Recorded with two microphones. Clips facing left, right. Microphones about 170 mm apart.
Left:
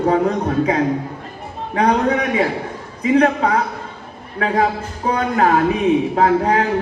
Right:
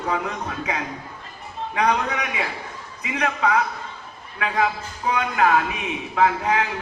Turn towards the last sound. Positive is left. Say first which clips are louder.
# left 6 dB
turn(degrees=35)  # may be behind; listen again after turning